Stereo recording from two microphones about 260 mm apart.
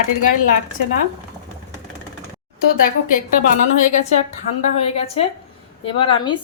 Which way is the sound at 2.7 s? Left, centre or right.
Left.